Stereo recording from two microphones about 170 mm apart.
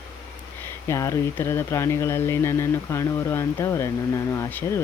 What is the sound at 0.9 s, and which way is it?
Speech, 15° left (ahead or behind).